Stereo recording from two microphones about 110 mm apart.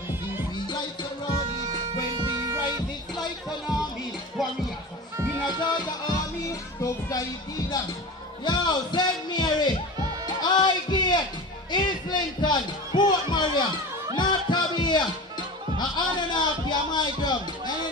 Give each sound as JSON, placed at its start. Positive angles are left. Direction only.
{"t": 0.7, "sound": "music", "side_deg": 40}
{"t": 2.0, "sound": "music", "side_deg": -40}
{"t": 5.1, "sound": "music", "side_deg": -25}
{"t": 5.5, "sound": "music", "side_deg": 40}
{"t": 8.5, "sound": "music", "side_deg": 40}
{"t": 10.4, "sound": "a sound", "side_deg": 40}
{"t": 11.7, "sound": "music", "side_deg": 40}